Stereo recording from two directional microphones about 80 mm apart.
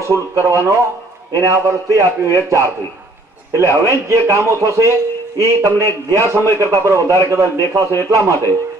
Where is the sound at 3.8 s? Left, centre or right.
Right.